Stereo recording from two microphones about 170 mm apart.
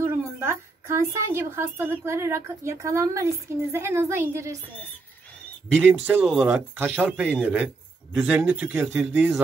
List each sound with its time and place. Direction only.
0.0 s speech: 15° right (ahead or behind)
5.9 s speech: 10° right (ahead or behind)